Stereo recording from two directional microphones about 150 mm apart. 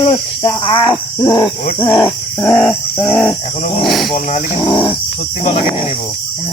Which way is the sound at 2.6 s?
15° left (ahead or behind).